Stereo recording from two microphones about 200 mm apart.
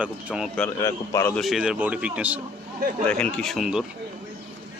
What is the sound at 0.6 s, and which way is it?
Speech, 15° left (ahead or behind).